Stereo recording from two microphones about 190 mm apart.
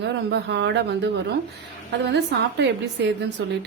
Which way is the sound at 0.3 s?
65° right (ahead or behind).